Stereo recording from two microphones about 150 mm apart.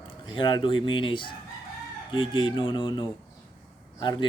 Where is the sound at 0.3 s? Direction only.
30° left (ahead or behind).